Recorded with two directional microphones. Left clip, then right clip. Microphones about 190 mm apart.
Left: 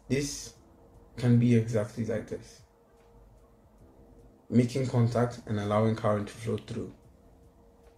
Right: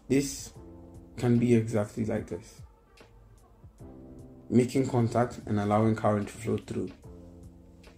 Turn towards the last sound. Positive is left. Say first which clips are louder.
# right 2 dB
turn(degrees=-45)  # may be behind; listen again after turning